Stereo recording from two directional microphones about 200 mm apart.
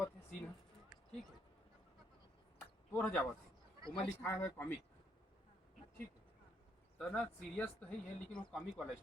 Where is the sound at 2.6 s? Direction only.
10° left (ahead or behind).